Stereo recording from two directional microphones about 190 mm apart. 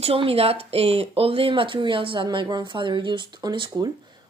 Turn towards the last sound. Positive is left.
turn(degrees=-25)  # may be behind; listen again after turning